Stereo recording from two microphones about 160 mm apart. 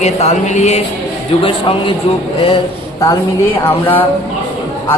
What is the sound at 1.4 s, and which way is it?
Speech, 30° left (ahead or behind).